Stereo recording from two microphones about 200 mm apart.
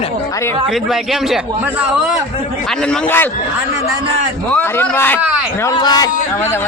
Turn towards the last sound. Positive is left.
turn(degrees=20)  # may be behind; listen again after turning